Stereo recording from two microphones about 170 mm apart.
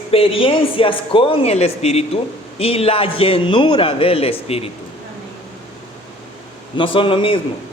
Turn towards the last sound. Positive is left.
turn(degrees=30)  # may be behind; listen again after turning